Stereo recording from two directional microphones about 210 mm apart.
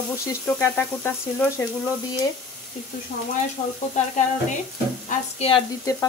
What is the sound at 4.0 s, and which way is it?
Sizzle, 35° left (ahead or behind).